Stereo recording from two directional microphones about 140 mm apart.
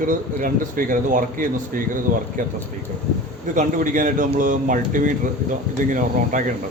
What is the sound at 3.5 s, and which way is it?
Speech, 70° right (ahead or behind).